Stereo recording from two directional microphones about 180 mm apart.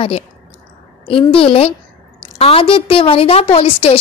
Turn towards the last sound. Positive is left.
turn(degrees=35)  # may be behind; listen again after turning